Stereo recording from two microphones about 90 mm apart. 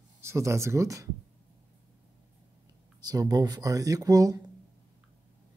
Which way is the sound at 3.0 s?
45° right (ahead or behind).